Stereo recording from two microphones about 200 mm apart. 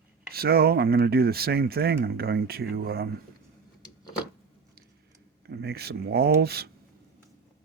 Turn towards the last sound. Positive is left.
turn(degrees=-50)  # may be behind; listen again after turning